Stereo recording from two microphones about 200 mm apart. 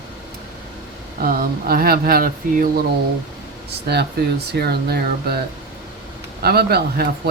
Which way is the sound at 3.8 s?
55° right (ahead or behind).